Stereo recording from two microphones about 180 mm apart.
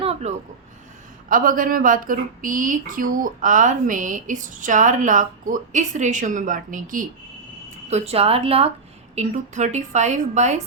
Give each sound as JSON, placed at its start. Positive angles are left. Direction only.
{"t": 0.0, "sound": "a sound", "side_deg": -35}
{"t": 1.3, "sound": "speech", "side_deg": -50}
{"t": 7.9, "sound": "a woman's voice", "side_deg": -35}